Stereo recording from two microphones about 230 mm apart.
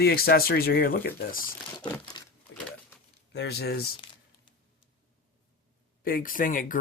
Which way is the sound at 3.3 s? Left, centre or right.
Left.